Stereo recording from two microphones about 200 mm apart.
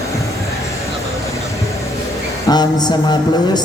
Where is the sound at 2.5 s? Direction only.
20° left (ahead or behind).